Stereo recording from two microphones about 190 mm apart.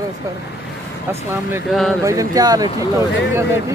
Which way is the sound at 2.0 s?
15° right (ahead or behind).